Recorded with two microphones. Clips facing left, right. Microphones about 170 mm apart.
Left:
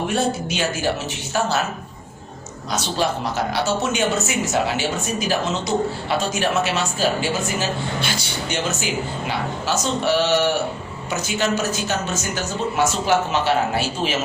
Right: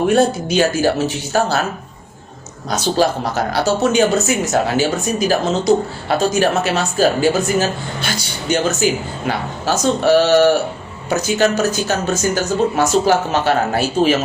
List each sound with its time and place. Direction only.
0.1 s speech: 40° right (ahead or behind)
2.6 s speech: 40° right (ahead or behind)